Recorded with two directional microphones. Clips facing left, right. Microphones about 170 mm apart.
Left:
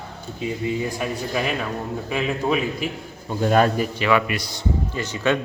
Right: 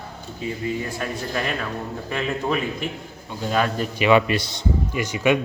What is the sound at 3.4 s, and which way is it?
Speech, 45° left (ahead or behind).